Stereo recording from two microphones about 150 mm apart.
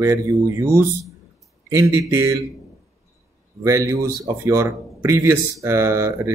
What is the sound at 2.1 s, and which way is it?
Speech, 20° right (ahead or behind).